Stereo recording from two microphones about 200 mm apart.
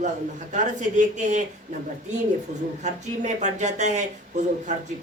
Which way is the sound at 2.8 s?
35° right (ahead or behind).